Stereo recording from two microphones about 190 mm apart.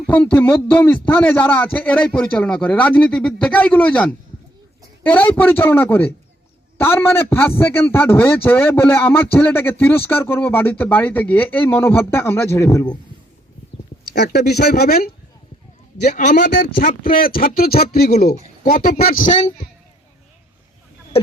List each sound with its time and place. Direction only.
0.0 s a man's voice: 10° left (ahead or behind)
14.1 s speech: 60° left (ahead or behind)
16.0 s a man's voice: 40° left (ahead or behind)